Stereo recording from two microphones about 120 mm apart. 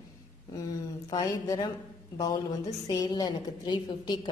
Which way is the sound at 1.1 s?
30° left (ahead or behind).